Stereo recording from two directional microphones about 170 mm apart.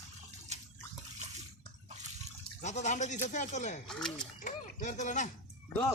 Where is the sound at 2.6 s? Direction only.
45° left (ahead or behind).